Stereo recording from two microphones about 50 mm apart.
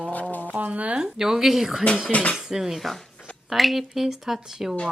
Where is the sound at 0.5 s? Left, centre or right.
Right.